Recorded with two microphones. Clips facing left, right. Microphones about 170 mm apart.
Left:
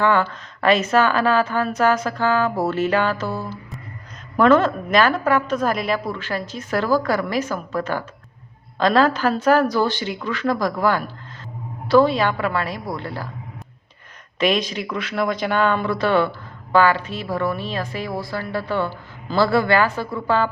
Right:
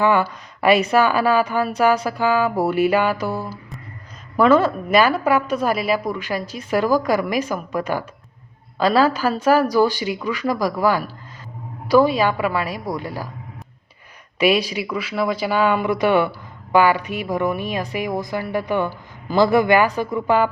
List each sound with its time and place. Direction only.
0.0 s a woman's voice: 10° right (ahead or behind)
14.3 s a woman's voice: 10° right (ahead or behind)